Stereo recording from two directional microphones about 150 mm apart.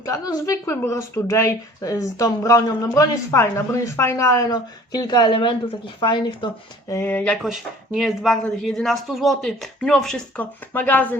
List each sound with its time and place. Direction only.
0.0 s a woman's voice: 25° left (ahead or behind)
6.9 s speech: 10° left (ahead or behind)